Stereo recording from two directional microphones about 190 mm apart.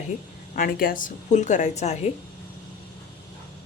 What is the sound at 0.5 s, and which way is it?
A woman's voice, 50° left (ahead or behind).